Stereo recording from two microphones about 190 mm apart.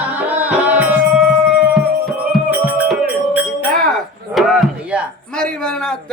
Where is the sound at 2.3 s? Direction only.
5° right (ahead or behind).